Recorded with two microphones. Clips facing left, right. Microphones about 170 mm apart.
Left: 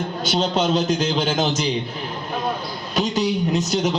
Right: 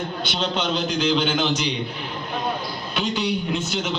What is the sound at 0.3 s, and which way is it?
A man's voice, 40° left (ahead or behind).